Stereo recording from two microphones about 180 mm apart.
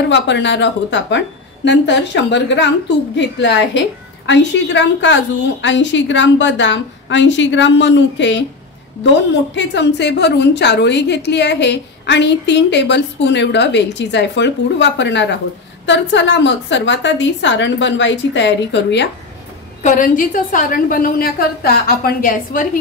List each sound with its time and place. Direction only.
0.1 s a woman's voice: 80° left
19.8 s a woman's voice: 45° left (ahead or behind)